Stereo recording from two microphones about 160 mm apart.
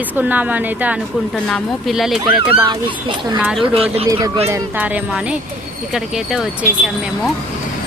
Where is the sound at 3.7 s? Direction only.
35° right (ahead or behind).